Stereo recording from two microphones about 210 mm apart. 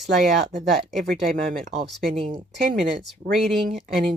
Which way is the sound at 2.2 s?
30° right (ahead or behind).